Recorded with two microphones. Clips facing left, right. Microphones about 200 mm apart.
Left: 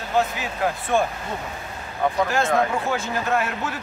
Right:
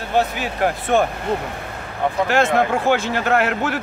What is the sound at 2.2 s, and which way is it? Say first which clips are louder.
A man's voice: right 6 dB; 75° right (ahead or behind).